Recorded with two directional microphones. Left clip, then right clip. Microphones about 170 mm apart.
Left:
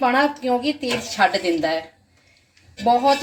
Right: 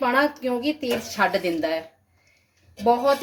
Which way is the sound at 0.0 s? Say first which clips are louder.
Left 3 dB; 10° right (ahead or behind).